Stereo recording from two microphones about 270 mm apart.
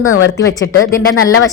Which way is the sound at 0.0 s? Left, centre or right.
Left.